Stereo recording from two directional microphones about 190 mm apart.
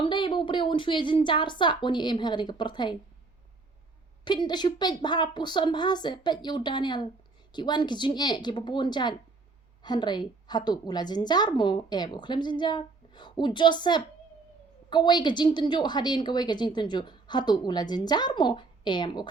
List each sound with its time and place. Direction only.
0.0 s a woman's voice: 25° left (ahead or behind)
4.2 s a woman's voice: 25° left (ahead or behind)